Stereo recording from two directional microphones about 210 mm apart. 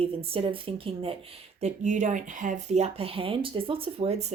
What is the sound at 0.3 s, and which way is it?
Speech, 25° right (ahead or behind).